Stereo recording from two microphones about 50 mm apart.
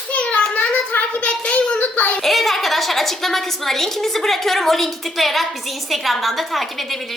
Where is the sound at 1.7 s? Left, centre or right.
Left.